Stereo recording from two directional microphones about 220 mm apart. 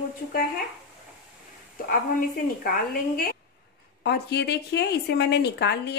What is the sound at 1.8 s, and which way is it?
A woman's voice, 40° left (ahead or behind).